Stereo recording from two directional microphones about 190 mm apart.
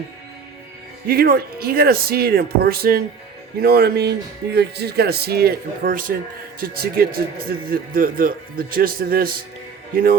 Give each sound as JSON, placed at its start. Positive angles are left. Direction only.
{"t": 1.0, "sound": "speech", "side_deg": -55}